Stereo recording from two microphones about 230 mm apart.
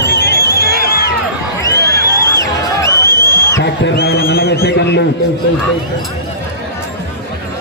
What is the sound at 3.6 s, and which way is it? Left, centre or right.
A man's voice, left.